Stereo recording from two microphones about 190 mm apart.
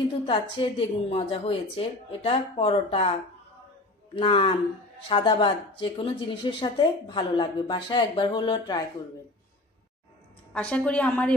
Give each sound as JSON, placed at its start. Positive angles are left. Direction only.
{"t": 0.3, "sound": "speech", "side_deg": 30}
{"t": 10.5, "sound": "a woman's voice", "side_deg": 5}